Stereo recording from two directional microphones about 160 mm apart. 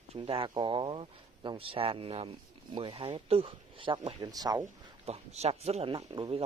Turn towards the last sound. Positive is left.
turn(degrees=-35)  # may be behind; listen again after turning